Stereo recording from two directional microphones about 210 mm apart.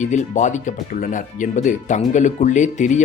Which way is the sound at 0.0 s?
35° left (ahead or behind).